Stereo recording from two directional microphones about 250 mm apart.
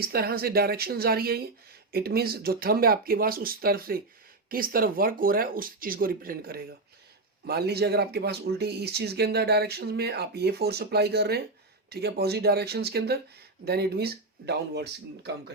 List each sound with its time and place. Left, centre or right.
0.0 s speech: right